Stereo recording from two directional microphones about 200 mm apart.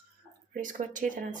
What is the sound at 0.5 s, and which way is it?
Speech, 40° right (ahead or behind).